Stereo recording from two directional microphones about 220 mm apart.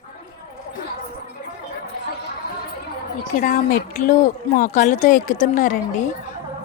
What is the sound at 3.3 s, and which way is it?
Speech, 35° left (ahead or behind).